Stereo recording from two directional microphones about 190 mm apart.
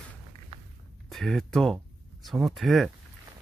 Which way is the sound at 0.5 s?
30° right (ahead or behind).